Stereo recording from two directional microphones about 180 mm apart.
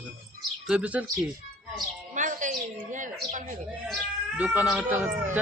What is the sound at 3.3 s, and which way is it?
Speech, 45° right (ahead or behind).